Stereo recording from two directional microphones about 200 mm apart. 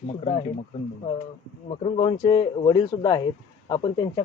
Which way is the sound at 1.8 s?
25° left (ahead or behind).